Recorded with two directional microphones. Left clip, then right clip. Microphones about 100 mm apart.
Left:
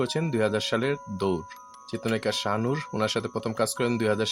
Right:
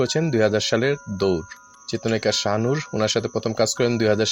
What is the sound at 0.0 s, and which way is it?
Speech, 20° right (ahead or behind).